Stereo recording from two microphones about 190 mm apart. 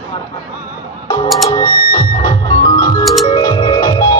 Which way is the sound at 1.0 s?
20° left (ahead or behind).